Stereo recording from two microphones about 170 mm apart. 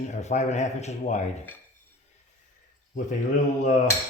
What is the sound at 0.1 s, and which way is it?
A man's voice, 45° left (ahead or behind).